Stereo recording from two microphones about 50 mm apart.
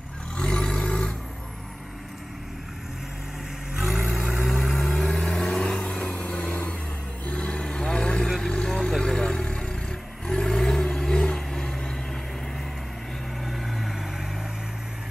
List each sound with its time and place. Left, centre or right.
0.4 s vehicle: centre
3.8 s vehicle: centre
13.4 s vehicle: centre